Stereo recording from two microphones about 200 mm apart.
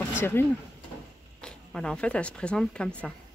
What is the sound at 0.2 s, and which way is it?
A woman's voice, 10° left (ahead or behind).